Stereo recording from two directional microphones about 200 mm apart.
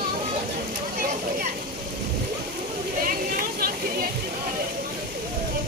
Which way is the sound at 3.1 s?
45° right (ahead or behind).